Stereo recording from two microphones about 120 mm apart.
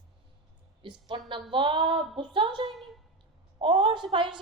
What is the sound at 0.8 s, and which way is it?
A woman's voice, 45° right (ahead or behind).